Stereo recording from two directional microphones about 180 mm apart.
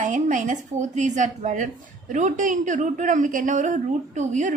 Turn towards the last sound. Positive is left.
turn(degrees=-40)  # may be behind; listen again after turning